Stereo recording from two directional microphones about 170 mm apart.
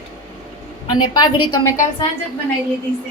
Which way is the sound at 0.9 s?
25° left (ahead or behind).